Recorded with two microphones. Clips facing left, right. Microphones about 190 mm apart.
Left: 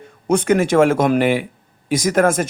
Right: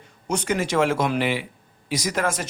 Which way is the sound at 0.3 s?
55° left (ahead or behind).